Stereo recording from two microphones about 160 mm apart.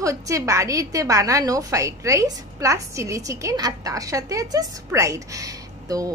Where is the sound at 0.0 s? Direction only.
20° right (ahead or behind).